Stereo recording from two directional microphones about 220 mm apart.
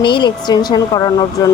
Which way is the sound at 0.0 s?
20° left (ahead or behind).